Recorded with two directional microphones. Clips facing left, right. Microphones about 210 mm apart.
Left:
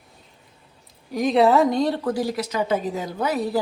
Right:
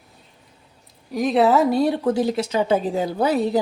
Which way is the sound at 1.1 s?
Centre (ahead or behind).